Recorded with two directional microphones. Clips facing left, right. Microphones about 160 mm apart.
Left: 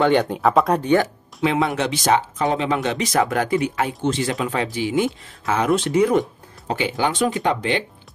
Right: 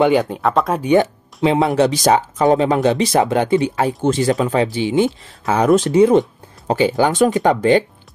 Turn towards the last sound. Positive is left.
turn(degrees=-45)  # may be behind; listen again after turning